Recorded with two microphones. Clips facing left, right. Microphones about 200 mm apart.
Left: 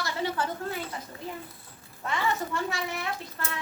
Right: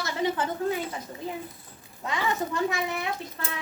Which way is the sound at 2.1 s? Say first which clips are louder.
Right 1 dB; 15° right (ahead or behind).